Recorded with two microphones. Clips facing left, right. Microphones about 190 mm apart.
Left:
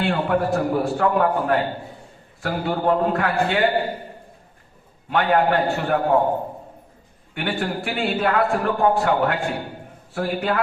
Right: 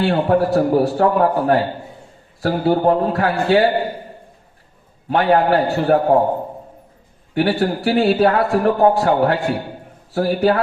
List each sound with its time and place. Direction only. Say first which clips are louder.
0.0 s a man's voice: right 5 dB; 35° right (ahead or behind)
5.0 s a man's voice: right 4 dB; 35° right (ahead or behind)
7.3 s a man's voice: right 8 dB; 35° right (ahead or behind)